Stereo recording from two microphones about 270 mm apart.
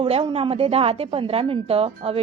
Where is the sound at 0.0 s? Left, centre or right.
Centre.